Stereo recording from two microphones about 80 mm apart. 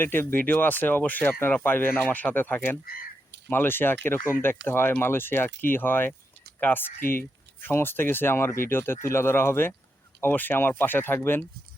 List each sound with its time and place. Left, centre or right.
0.0 s speech: left